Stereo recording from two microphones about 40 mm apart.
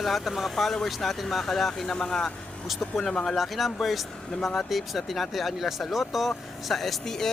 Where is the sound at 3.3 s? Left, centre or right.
Centre.